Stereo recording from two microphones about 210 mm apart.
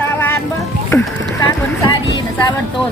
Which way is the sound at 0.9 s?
10° left (ahead or behind).